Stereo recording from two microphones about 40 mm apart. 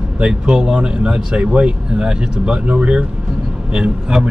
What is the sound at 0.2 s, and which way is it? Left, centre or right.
A man's voice, right.